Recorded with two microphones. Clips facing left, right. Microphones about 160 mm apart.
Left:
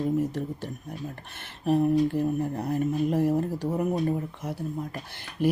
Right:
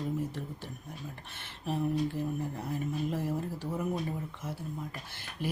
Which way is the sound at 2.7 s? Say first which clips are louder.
Left 9 dB; 45° left (ahead or behind).